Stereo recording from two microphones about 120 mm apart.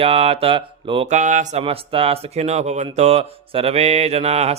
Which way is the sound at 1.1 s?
90° right.